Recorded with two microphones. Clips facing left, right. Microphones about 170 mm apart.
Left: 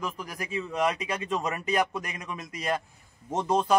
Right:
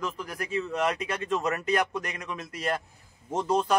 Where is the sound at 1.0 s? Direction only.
10° left (ahead or behind).